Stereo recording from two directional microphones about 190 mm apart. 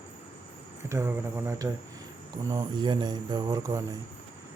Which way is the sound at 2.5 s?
20° right (ahead or behind).